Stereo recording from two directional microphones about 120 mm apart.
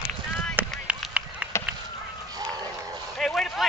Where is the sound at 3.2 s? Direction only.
5° left (ahead or behind).